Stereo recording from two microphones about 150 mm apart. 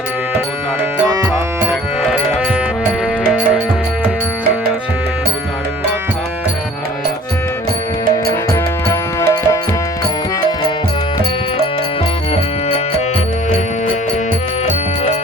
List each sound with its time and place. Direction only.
1.0 s music: 25° right (ahead or behind)
1.6 s music: 5° right (ahead or behind)
8.9 s music: 20° left (ahead or behind)